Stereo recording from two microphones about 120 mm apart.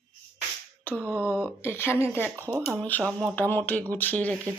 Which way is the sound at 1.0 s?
15° right (ahead or behind).